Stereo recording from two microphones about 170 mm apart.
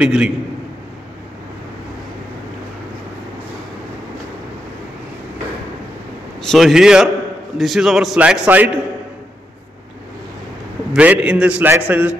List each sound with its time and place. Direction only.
0.0 s a man's voice: 5° right (ahead or behind)
6.5 s a man's voice: centre (ahead or behind)
10.9 s a man's voice: 5° right (ahead or behind)